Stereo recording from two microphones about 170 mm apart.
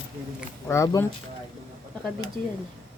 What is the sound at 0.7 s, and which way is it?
Speech, 15° left (ahead or behind).